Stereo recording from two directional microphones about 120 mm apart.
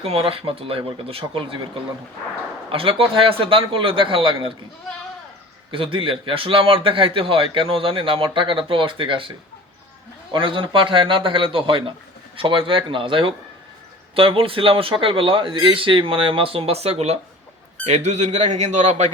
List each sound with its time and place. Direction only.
0.0 s a man's voice: 50° right (ahead or behind)
2.6 s a man's voice: 50° right (ahead or behind)
5.7 s a man's voice: 45° right (ahead or behind)
10.3 s a man's voice: 45° right (ahead or behind); by 19.1 s 75° right (ahead or behind)